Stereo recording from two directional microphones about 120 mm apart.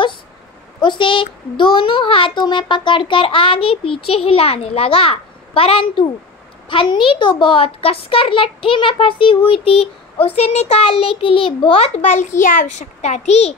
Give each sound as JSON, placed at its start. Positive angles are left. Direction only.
{"t": 0.7, "sound": "a child's voice", "side_deg": 40}
{"t": 12.4, "sound": "a child's voice", "side_deg": 90}